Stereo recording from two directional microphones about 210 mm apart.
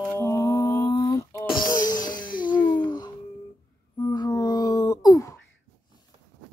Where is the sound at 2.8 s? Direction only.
20° left (ahead or behind).